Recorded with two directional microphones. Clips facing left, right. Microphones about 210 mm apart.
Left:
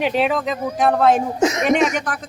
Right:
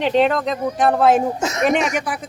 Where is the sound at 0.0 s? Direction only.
5° left (ahead or behind).